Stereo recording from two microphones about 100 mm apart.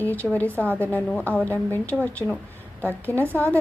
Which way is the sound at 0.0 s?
20° left (ahead or behind).